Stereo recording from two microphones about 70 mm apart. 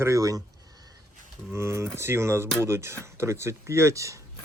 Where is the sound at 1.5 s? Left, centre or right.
Right.